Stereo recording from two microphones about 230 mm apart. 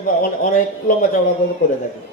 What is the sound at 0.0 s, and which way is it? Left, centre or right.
Speech, left.